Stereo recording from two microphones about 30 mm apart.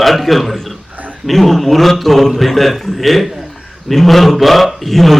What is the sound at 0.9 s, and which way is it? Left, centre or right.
Dog, right.